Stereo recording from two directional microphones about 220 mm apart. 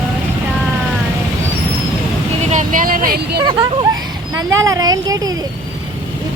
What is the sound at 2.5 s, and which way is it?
Speech, 35° right (ahead or behind).